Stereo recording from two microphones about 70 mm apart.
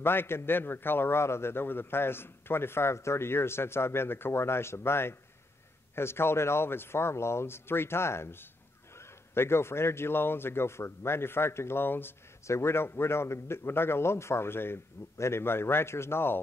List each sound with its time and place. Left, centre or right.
0.0 s a man's voice: left